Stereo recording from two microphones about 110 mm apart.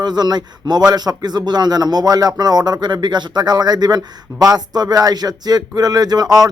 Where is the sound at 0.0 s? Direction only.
40° right (ahead or behind).